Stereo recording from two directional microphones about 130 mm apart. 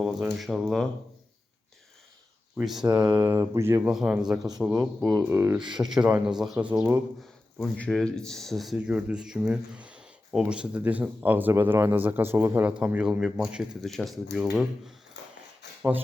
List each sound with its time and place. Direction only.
0.0 s speech: centre (ahead or behind)
2.8 s speech: 30° right (ahead or behind)
3.1 s speech: 15° right (ahead or behind)
3.8 s speech: 5° right (ahead or behind)
5.0 s speech: 20° right (ahead or behind)
5.8 s speech: 10° right (ahead or behind)
7.6 s speech: 5° left (ahead or behind)